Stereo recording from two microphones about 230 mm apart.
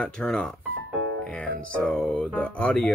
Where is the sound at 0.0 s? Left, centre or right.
Centre.